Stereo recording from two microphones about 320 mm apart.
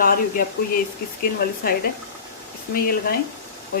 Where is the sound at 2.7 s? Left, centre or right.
Left.